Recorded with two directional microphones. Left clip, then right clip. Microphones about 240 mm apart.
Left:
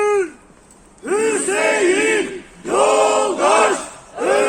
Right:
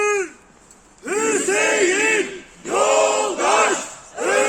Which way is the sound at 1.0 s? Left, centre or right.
Centre.